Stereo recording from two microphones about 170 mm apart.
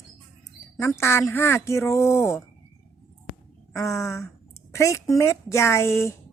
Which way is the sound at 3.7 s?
15° left (ahead or behind).